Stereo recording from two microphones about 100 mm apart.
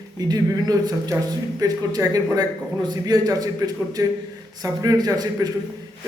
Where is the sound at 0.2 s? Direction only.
40° right (ahead or behind).